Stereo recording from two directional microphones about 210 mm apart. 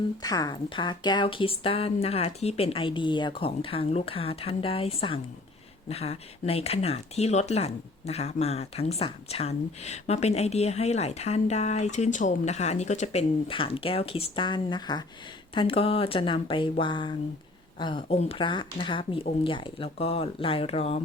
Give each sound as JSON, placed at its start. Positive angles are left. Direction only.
{"t": 0.2, "sound": "speech", "side_deg": 20}